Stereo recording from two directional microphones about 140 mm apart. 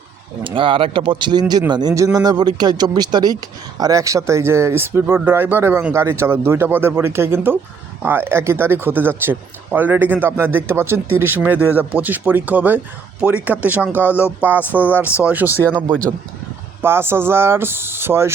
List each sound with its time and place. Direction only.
0.4 s speech: 40° right (ahead or behind); by 15.6 s 15° right (ahead or behind)
16.8 s speech: 15° right (ahead or behind)